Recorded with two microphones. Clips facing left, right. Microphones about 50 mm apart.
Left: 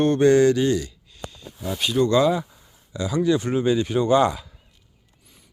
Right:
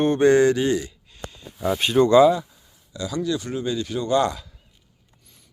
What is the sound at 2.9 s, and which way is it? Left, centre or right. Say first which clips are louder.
Speech: left 4 dB; left.